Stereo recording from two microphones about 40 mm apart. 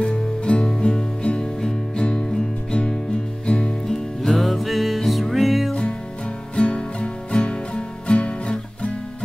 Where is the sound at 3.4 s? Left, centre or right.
Left.